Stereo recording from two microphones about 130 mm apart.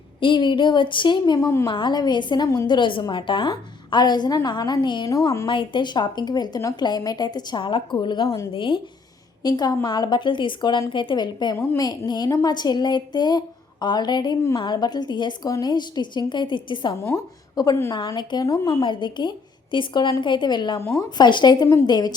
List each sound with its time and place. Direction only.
0.2 s a woman's voice: 40° left (ahead or behind)
1.7 s a woman's voice: 35° left (ahead or behind)
5.5 s a woman's voice: 40° left (ahead or behind)
11.5 s a woman's voice: 15° left (ahead or behind)
11.8 s a woman's voice: 30° left (ahead or behind)
17.0 s a woman's voice: 20° left (ahead or behind)